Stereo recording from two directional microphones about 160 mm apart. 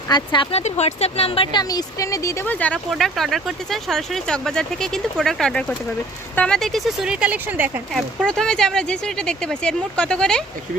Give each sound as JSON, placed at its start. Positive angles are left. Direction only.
{"t": 0.1, "sound": "speech", "side_deg": 30}
{"t": 0.5, "sound": "speech", "side_deg": 45}
{"t": 1.5, "sound": "speech", "side_deg": 20}
{"t": 7.9, "sound": "speech", "side_deg": 5}